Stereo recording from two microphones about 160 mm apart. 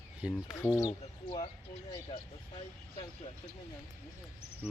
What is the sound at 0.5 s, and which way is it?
Speech, 15° left (ahead or behind).